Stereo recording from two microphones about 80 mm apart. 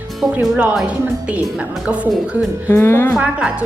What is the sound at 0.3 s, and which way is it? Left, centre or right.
A woman's voice, right.